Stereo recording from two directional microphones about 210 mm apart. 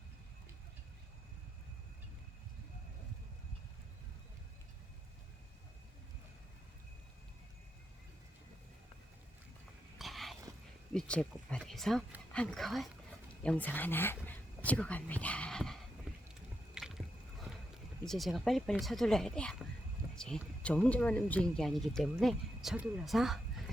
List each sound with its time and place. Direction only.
10.0 s dog: centre (ahead or behind)
10.9 s speech: 5° left (ahead or behind)
16.1 s vehicle: 5° right (ahead or behind)
16.7 s squish: centre (ahead or behind)
18.0 s speech: centre (ahead or behind)